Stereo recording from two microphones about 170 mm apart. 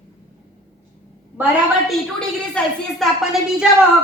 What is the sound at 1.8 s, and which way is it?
A woman's voice, centre (ahead or behind).